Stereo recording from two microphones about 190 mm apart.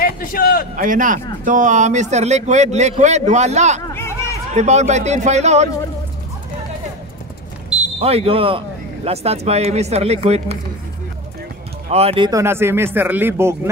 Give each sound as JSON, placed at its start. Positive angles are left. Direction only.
{"t": 0.0, "sound": "a man's voice", "side_deg": 45}
{"t": 0.7, "sound": "speech", "side_deg": -45}
{"t": 3.8, "sound": "hubbub", "side_deg": 15}
{"t": 4.6, "sound": "speech", "side_deg": -35}
{"t": 8.0, "sound": "speech", "side_deg": -30}
{"t": 11.9, "sound": "speech", "side_deg": -30}
{"t": 12.3, "sound": "speech", "side_deg": -15}